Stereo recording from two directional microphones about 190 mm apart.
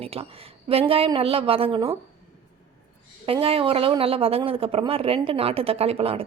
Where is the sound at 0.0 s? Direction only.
30° right (ahead or behind).